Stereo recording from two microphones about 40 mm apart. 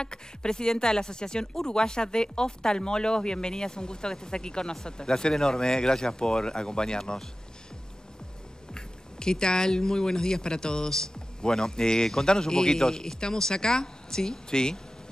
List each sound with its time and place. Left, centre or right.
0.0 s speech: left
8.7 s speech: centre